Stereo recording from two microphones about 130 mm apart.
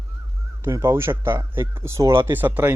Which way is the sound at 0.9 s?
20° right (ahead or behind).